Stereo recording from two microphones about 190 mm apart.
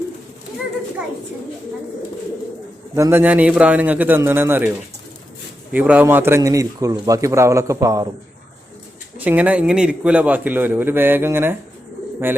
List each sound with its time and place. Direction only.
2.9 s a man's voice: 10° right (ahead or behind)
5.7 s a man's voice: 10° right (ahead or behind)
9.1 s a man's voice: 10° right (ahead or behind)